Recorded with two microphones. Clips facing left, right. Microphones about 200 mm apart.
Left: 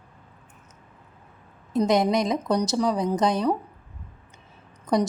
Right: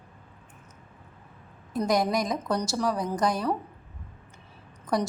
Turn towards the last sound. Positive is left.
turn(degrees=20)  # may be behind; listen again after turning